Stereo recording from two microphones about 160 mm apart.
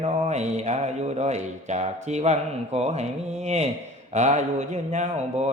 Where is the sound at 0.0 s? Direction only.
45° right (ahead or behind).